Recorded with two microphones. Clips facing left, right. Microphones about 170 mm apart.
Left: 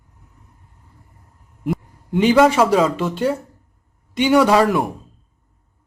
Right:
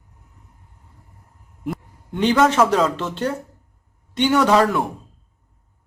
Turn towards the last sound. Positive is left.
turn(degrees=5)  # may be behind; listen again after turning